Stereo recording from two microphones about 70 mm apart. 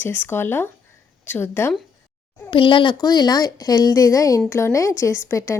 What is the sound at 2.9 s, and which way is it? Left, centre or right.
Speech, left.